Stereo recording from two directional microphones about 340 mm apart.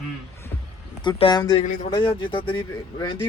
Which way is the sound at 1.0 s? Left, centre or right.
Centre.